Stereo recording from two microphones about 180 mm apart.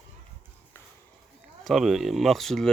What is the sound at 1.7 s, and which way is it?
Speech, centre (ahead or behind).